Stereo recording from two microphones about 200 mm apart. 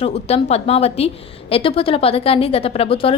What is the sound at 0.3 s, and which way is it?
A woman's voice, 30° left (ahead or behind).